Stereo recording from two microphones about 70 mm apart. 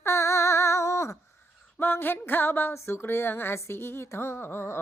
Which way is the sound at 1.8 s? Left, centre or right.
Left.